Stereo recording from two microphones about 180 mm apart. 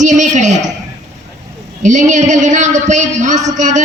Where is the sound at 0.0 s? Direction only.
45° right (ahead or behind).